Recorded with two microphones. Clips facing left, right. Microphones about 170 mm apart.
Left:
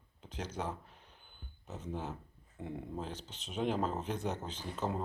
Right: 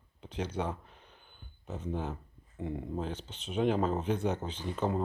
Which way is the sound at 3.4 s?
Centre (ahead or behind).